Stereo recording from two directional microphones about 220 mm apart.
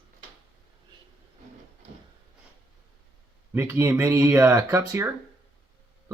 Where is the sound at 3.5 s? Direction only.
10° right (ahead or behind).